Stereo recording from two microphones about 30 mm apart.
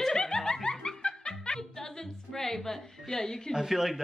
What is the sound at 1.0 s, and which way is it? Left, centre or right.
Music, left.